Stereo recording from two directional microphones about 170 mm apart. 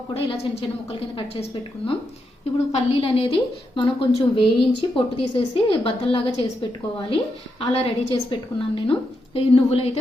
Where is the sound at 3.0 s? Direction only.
35° left (ahead or behind).